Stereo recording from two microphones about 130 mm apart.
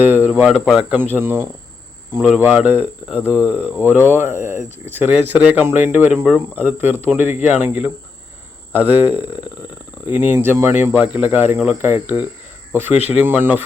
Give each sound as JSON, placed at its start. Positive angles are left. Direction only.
{"t": 0.0, "sound": "speech", "side_deg": -15}
{"t": 0.3, "sound": "speech", "side_deg": -5}